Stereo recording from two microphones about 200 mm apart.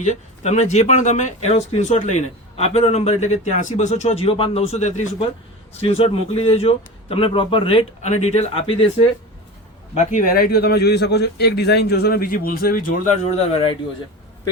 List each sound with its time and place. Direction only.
0.0 s a man's voice: 35° left (ahead or behind)